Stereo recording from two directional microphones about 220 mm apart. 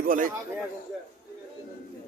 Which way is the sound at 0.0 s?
40° right (ahead or behind).